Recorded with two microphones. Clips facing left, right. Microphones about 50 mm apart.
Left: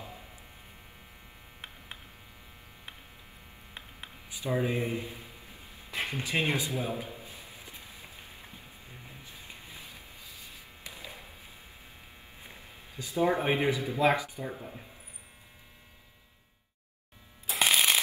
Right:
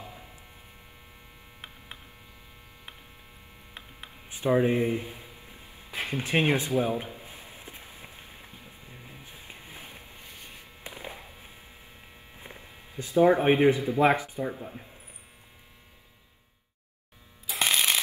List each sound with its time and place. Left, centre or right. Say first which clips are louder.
4.3 s speech: right 7 dB; right
6.0 s a sound: right 6 dB; right
12.4 s a sound: right 4 dB; right
13.1 s speech: right 7 dB; right
14.5 s speech: right 3 dB; centre
17.6 s shuffling cards: even; centre